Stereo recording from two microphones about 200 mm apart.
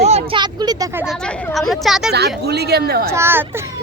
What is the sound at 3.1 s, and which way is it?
Speech, 10° right (ahead or behind).